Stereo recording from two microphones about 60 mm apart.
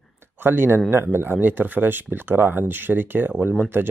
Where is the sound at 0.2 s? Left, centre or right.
Right.